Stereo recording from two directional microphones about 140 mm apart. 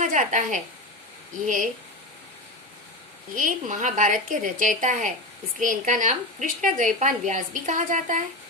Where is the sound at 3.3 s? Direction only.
65° right (ahead or behind).